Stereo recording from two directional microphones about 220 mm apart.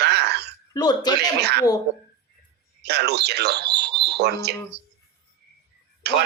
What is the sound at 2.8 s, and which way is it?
Speech, 50° right (ahead or behind).